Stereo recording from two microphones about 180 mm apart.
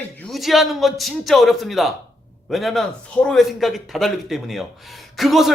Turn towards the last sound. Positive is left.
turn(degrees=0)  # may be behind; listen again after turning